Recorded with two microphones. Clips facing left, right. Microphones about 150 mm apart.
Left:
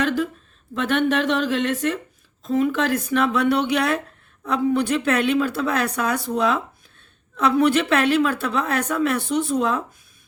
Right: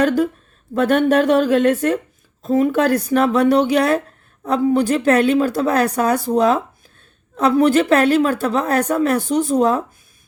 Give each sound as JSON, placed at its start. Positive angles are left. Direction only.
{"t": 0.0, "sound": "speech", "side_deg": -45}